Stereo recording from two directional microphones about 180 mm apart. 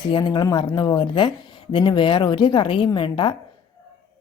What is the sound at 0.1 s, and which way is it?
A woman's voice, 25° left (ahead or behind).